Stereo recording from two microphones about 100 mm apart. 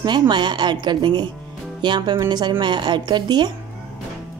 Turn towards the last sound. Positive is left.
turn(degrees=-50)  # may be behind; listen again after turning